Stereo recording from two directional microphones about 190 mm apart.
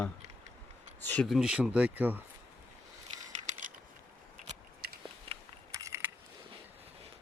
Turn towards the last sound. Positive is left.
turn(degrees=-15)  # may be behind; listen again after turning